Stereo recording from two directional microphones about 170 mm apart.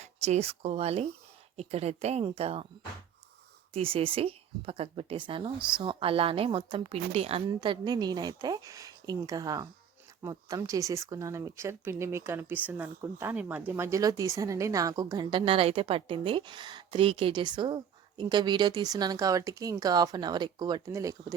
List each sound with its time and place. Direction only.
0.0 s a woman's voice: 40° right (ahead or behind)
3.7 s a woman's voice: 35° right (ahead or behind)